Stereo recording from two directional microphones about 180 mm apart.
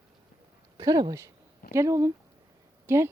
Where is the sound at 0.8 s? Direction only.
25° right (ahead or behind).